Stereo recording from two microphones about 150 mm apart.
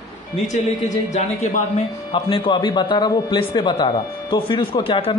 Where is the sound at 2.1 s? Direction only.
35° left (ahead or behind).